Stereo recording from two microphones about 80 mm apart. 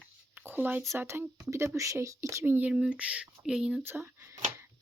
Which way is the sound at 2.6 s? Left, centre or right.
Centre.